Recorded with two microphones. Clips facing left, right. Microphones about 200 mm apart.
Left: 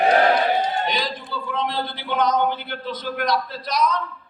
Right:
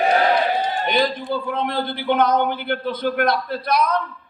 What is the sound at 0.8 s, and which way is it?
A man's voice, 55° right (ahead or behind).